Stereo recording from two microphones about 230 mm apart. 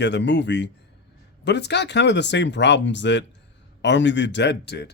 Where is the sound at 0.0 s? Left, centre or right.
Left.